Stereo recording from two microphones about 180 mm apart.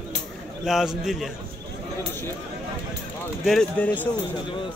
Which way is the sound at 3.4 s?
5° left (ahead or behind).